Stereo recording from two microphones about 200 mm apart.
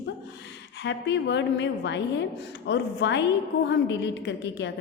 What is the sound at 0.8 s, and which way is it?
A woman's voice, 65° left (ahead or behind).